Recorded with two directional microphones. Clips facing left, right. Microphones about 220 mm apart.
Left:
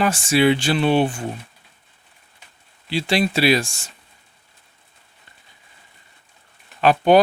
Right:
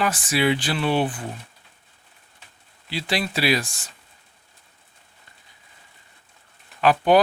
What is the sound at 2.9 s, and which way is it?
Speech, 25° left (ahead or behind).